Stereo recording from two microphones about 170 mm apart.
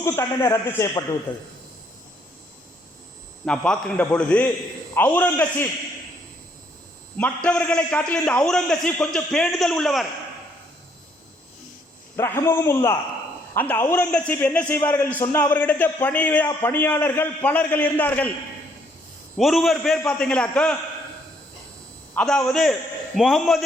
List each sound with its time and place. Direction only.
0.0 s a man's voice: 15° left (ahead or behind)
3.4 s a man's voice: 5° left (ahead or behind)
7.2 s a man's voice: 5° left (ahead or behind)
12.1 s a man's voice: 15° left (ahead or behind)
19.4 s a man's voice: centre (ahead or behind)
22.1 s a man's voice: 5° left (ahead or behind)